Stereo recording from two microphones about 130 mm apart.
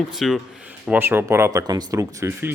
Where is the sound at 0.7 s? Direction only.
15° right (ahead or behind).